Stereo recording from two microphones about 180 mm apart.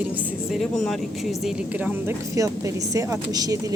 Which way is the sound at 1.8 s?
15° right (ahead or behind).